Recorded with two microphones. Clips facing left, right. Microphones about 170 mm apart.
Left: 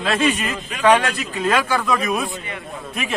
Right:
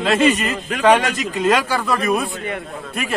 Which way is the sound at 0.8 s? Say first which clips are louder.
Right 1 dB; 10° right (ahead or behind).